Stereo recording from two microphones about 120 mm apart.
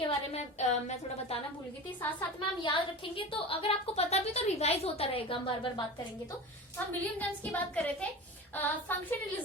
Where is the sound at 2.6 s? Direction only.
45° left (ahead or behind).